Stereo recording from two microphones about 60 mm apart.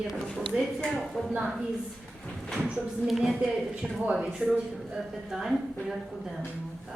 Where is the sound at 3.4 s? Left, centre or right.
Centre.